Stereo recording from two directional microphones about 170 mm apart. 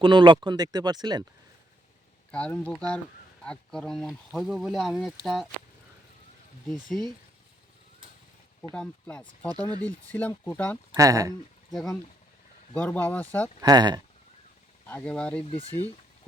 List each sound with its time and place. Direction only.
0.0 s speech: 30° right (ahead or behind)
2.3 s speech: 5° left (ahead or behind)
6.7 s speech: 5° left (ahead or behind)
8.7 s speech: 5° left (ahead or behind)
10.9 s speech: 20° right (ahead or behind)
11.7 s speech: centre (ahead or behind)
13.6 s speech: 25° right (ahead or behind)
14.8 s speech: 10° left (ahead or behind)